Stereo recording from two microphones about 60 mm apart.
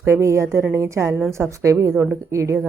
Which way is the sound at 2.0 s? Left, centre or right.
Right.